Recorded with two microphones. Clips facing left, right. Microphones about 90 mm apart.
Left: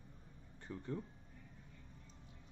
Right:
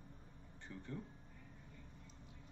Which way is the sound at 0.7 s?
25° left (ahead or behind).